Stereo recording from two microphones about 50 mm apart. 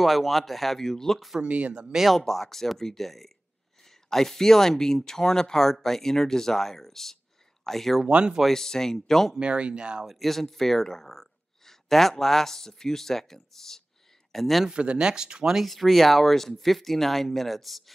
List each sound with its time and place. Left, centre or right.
0.0 s speech: centre
1.4 s speech: right
2.0 s speech: centre
8.0 s speech: centre
8.5 s speech: centre
9.4 s speech: right
10.0 s speech: centre
14.7 s speech: centre
15.6 s speech: centre